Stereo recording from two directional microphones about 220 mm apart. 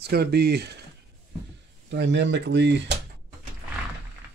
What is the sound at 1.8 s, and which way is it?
Speech, 55° right (ahead or behind).